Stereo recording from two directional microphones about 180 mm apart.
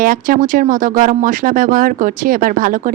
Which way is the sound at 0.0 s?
50° right (ahead or behind).